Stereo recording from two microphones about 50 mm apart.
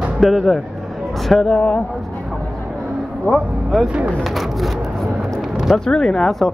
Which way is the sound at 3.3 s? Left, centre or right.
Centre.